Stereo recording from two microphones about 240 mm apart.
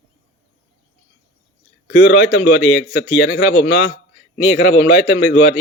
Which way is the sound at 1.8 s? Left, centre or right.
Left.